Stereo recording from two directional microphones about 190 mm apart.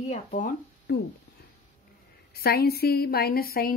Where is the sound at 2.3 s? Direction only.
55° left (ahead or behind).